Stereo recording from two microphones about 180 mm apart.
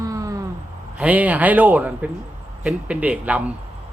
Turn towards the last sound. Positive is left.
turn(degrees=-10)  # may be behind; listen again after turning